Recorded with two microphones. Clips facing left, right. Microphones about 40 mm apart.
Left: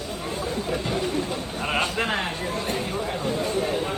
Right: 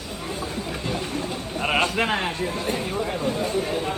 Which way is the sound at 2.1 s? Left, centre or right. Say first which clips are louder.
Right 2 dB; centre.